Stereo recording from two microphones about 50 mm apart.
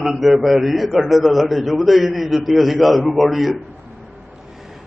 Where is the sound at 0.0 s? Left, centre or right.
Centre.